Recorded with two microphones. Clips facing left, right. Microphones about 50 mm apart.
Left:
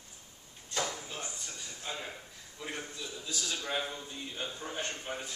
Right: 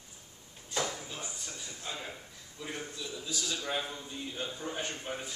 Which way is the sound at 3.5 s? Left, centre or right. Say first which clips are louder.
Left 1 dB; centre.